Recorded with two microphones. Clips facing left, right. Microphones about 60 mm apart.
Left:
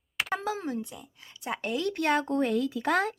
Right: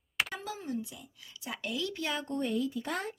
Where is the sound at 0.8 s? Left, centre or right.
Left.